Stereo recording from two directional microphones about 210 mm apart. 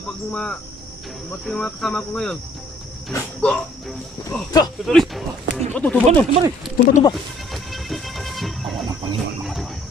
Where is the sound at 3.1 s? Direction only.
5° left (ahead or behind).